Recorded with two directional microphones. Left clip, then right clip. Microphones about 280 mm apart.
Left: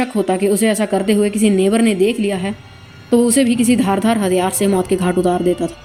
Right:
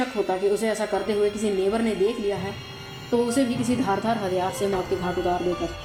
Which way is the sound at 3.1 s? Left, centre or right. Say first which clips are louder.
Left 9 dB; left.